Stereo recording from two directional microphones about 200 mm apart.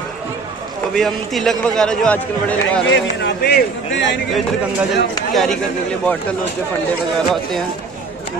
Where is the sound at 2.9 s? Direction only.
60° left (ahead or behind).